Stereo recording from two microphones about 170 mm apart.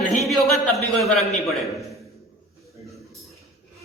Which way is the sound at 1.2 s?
40° left (ahead or behind).